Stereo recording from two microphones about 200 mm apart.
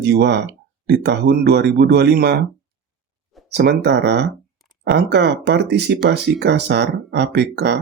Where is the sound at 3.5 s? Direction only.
55° right (ahead or behind).